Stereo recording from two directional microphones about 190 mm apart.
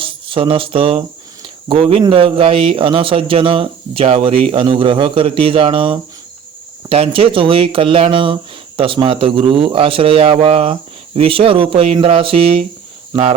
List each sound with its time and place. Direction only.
0.0 s speech: 25° right (ahead or behind)